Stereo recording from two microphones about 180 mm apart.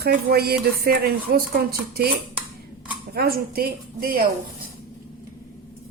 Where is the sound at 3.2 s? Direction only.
55° right (ahead or behind).